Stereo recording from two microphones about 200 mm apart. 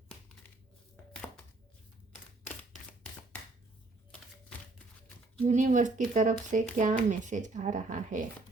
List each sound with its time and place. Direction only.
5.4 s speech: 35° right (ahead or behind)